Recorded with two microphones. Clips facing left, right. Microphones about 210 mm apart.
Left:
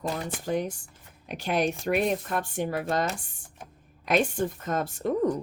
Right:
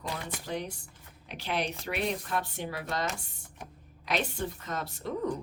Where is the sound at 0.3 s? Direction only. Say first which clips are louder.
Left 7 dB; 45° left (ahead or behind).